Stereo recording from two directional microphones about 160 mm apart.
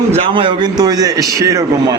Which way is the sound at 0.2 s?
30° right (ahead or behind).